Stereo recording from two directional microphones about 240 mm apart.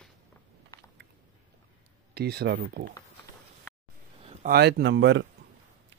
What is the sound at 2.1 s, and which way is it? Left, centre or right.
Speech, right.